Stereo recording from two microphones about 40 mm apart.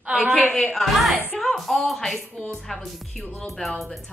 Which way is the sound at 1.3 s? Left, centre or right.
Centre.